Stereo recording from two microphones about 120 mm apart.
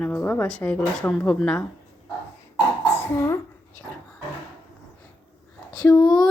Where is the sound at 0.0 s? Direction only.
15° left (ahead or behind).